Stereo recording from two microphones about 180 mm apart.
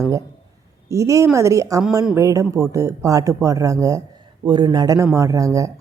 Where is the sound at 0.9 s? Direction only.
15° right (ahead or behind).